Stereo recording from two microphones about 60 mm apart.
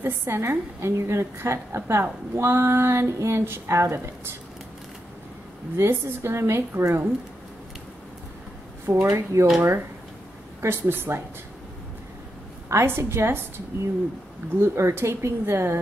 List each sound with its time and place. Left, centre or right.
0.0 s a woman's voice: right
5.8 s a woman's voice: right
8.9 s a woman's voice: right
9.3 s speech: right
10.6 s speech: right
12.6 s a woman's voice: right